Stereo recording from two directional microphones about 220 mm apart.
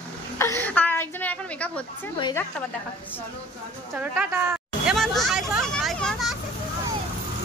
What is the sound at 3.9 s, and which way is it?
Speech, 10° right (ahead or behind).